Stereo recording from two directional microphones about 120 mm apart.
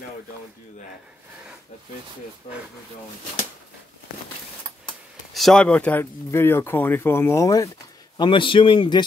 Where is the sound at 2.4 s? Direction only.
60° left (ahead or behind).